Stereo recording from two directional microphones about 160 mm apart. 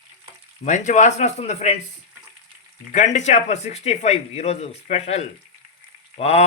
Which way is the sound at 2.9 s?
45° left (ahead or behind).